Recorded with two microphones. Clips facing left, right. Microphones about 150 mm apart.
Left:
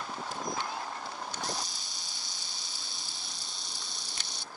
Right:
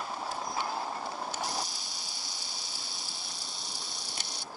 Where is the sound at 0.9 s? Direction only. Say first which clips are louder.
Right 3 dB; 25° right (ahead or behind).